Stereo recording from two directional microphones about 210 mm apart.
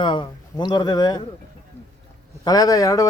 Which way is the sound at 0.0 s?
20° left (ahead or behind).